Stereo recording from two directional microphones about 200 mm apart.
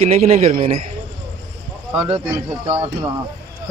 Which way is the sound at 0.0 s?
30° right (ahead or behind).